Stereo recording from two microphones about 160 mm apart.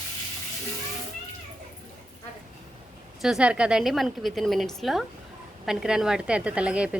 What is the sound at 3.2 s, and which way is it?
A woman's voice, 5° right (ahead or behind).